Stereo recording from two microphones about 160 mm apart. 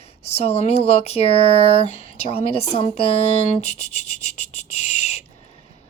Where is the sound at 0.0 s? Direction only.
40° left (ahead or behind).